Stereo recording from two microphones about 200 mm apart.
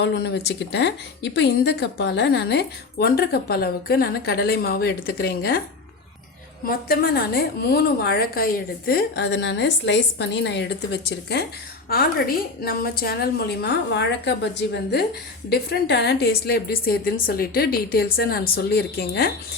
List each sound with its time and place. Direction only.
0.0 s speech: 55° left (ahead or behind)
6.7 s speech: 50° left (ahead or behind)